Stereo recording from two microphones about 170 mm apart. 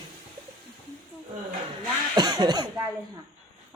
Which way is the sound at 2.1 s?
25° right (ahead or behind).